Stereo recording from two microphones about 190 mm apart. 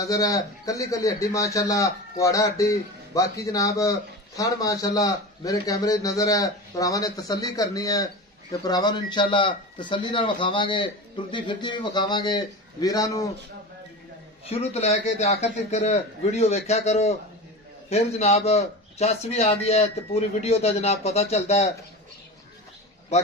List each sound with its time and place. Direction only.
0.0 s a man's voice: 15° left (ahead or behind)
14.4 s a man's voice: 35° left (ahead or behind)